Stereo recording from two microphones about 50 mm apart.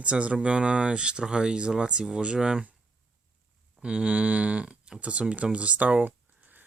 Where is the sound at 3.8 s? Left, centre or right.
Right.